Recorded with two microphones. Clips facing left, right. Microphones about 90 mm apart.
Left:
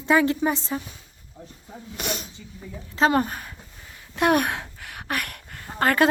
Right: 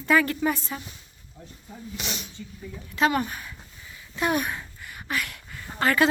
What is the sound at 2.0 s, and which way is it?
Speech, 50° left (ahead or behind).